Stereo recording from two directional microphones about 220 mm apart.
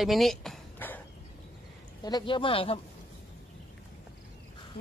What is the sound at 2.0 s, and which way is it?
Speech, 20° left (ahead or behind).